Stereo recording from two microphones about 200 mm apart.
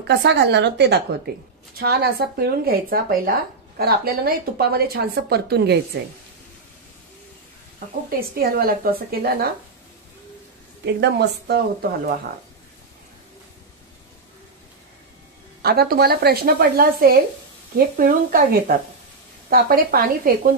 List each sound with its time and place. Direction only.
0.1 s a woman's voice: 60° right (ahead or behind)
8.2 s speech: 50° right (ahead or behind)
10.9 s a woman's voice: 55° right (ahead or behind)
15.6 s speech: 50° right (ahead or behind)